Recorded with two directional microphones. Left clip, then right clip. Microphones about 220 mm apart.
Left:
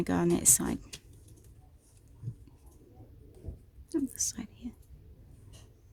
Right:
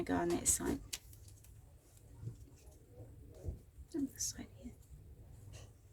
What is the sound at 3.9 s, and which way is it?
Whispering, 50° left (ahead or behind).